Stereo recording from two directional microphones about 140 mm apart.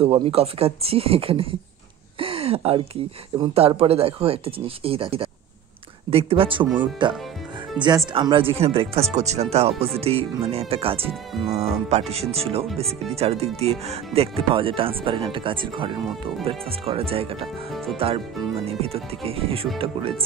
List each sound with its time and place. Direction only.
0.0 s speech: 45° right (ahead or behind)
2.1 s a sound: 40° right (ahead or behind)
3.3 s speech: 45° right (ahead or behind)
16.1 s speech: centre (ahead or behind)
16.4 s speech: 40° right (ahead or behind)